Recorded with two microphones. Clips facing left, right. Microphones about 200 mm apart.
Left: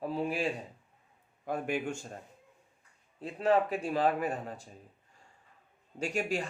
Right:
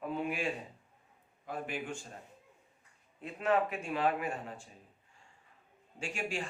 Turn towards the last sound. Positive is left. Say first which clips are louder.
# left 5 dB
turn(degrees=40)  # may be behind; listen again after turning